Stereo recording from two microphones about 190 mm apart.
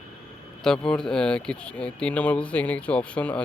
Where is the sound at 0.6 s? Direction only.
5° left (ahead or behind).